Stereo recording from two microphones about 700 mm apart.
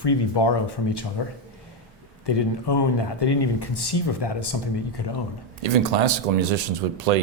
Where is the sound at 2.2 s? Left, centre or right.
Left.